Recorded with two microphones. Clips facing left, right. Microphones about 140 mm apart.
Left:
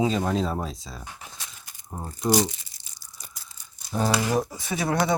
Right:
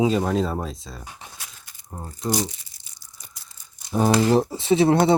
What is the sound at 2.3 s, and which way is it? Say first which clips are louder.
Crumpling: left 3 dB; 90° left.